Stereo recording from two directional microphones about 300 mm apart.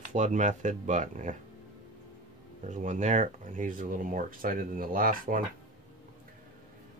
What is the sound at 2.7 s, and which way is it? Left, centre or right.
Speech, right.